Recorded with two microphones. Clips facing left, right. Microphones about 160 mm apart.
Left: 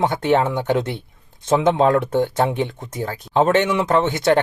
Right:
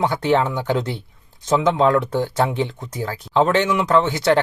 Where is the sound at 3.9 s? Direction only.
20° left (ahead or behind).